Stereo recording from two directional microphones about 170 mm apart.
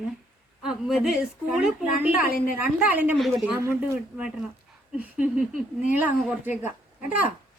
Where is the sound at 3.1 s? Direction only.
Centre (ahead or behind).